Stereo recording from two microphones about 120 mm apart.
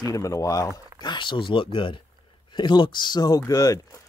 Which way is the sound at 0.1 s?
30° left (ahead or behind).